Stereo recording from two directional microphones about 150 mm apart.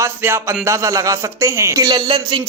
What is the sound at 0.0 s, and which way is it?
A man's voice, 15° right (ahead or behind).